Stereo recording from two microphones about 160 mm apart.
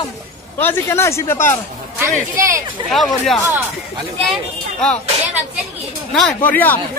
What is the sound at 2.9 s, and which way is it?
Speech, centre (ahead or behind).